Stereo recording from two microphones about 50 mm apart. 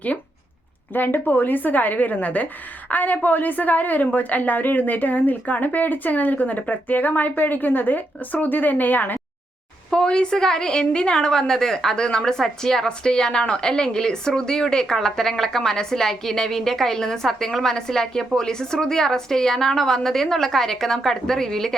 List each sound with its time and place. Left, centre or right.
0.9 s speech: left
9.9 s a woman's voice: centre